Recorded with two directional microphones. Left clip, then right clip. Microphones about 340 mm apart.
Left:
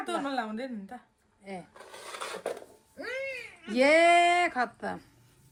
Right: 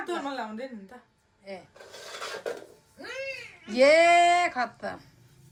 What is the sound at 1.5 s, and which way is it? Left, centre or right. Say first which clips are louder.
Speech: right 1 dB; centre.